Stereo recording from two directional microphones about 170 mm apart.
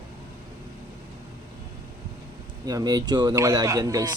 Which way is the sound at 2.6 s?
20° right (ahead or behind).